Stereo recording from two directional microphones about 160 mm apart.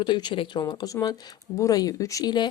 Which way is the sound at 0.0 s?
30° left (ahead or behind).